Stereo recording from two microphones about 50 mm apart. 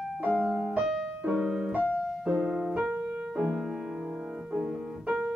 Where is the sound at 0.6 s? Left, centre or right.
Centre.